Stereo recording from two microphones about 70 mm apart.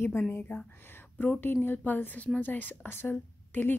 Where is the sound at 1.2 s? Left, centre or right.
Left.